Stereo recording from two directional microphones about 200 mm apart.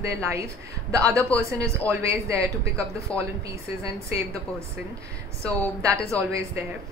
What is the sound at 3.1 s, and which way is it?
Speech, 5° left (ahead or behind).